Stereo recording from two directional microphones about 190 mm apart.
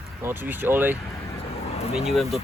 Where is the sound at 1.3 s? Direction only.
30° left (ahead or behind).